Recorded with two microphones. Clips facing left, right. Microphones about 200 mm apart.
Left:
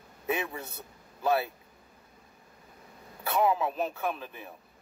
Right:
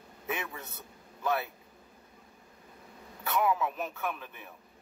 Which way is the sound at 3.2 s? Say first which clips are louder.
Left 2 dB; 25° left (ahead or behind).